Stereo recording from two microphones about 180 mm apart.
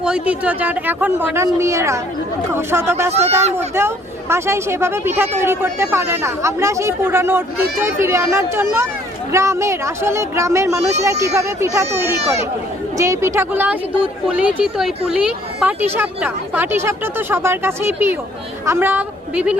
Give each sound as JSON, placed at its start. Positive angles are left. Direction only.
{"t": 0.0, "sound": "speech", "side_deg": -5}
{"t": 3.1, "sound": "speech", "side_deg": -35}
{"t": 3.8, "sound": "a woman's voice", "side_deg": -15}